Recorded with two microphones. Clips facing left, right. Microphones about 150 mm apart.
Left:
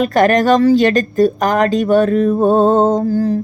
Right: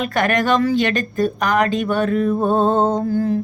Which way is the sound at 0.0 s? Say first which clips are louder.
Left 7 dB; 40° left (ahead or behind).